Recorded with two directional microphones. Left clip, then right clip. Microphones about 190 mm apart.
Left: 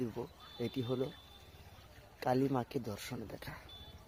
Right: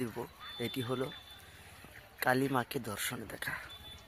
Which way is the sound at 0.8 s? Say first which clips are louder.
Even; 20° right (ahead or behind).